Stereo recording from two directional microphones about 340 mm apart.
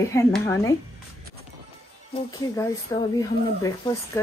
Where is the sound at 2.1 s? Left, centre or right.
Centre.